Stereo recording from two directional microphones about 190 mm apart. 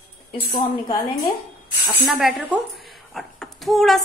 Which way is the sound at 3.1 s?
Centre (ahead or behind).